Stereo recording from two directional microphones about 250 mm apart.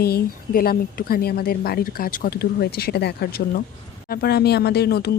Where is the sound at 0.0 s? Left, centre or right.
Left.